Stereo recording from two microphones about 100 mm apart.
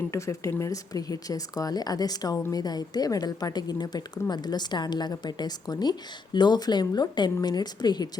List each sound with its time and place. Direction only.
0.1 s a woman's voice: 30° left (ahead or behind)